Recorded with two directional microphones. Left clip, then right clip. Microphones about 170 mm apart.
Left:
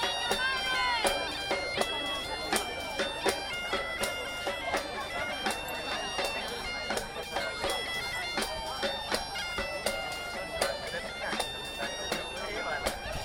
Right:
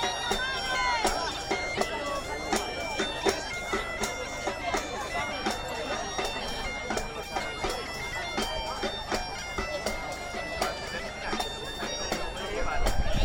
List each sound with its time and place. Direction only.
0.0 s bagpipes: 15° left (ahead or behind)
3.0 s bagpipes: 20° left (ahead or behind)
8.4 s bagpipes: 15° left (ahead or behind)